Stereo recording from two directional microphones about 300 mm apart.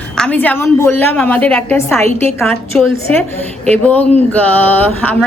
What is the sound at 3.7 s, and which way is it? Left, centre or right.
Speech, centre.